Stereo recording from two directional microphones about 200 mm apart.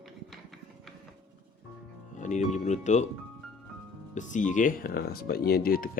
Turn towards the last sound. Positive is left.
turn(degrees=45)  # may be behind; listen again after turning